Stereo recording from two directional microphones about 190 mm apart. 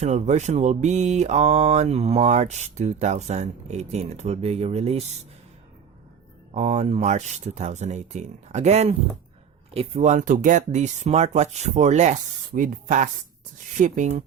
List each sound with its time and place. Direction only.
0.0 s mantra: 35° right (ahead or behind)
6.5 s mantra: 35° right (ahead or behind)